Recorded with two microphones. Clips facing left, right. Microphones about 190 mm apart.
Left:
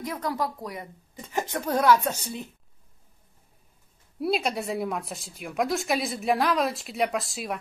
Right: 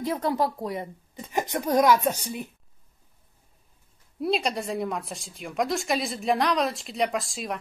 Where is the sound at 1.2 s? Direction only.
15° right (ahead or behind).